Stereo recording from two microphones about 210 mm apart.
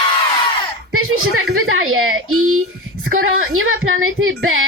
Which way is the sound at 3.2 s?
75° right (ahead or behind).